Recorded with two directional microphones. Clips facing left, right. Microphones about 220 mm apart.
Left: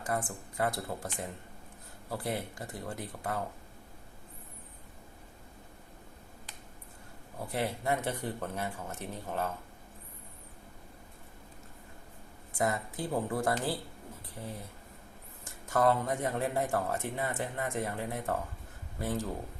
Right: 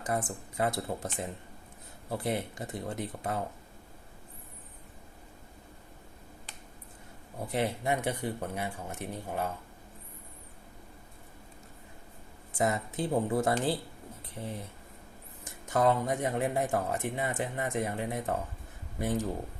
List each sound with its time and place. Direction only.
0.1 s speech: 20° right (ahead or behind)
2.0 s speech: 20° right (ahead or behind)
7.4 s speech: 20° right (ahead or behind)
12.5 s speech: 20° right (ahead or behind)
15.4 s speech: 20° right (ahead or behind)